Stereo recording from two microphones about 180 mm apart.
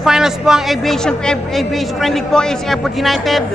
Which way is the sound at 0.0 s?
5° right (ahead or behind).